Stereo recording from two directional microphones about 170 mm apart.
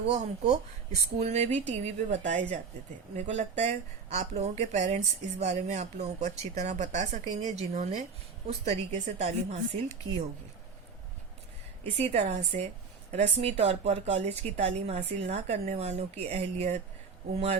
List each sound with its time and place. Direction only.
0.0 s a woman's voice: 40° right (ahead or behind)
12.1 s a woman's voice: 40° right (ahead or behind)